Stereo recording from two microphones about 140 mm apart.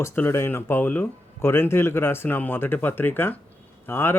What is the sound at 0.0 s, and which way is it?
A man's voice, 20° left (ahead or behind).